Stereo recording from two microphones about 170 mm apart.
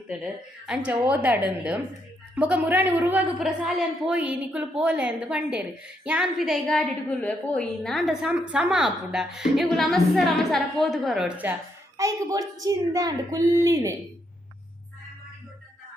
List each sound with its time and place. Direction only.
0.7 s a woman's voice: 5° right (ahead or behind)
11.9 s a woman's voice: 20° right (ahead or behind)